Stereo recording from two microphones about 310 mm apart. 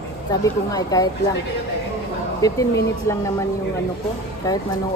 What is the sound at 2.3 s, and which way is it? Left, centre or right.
Speech, centre.